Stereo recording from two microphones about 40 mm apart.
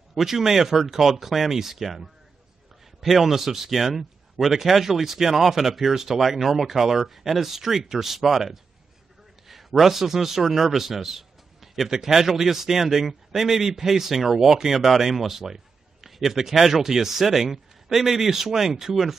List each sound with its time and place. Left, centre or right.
0.1 s a man's voice: centre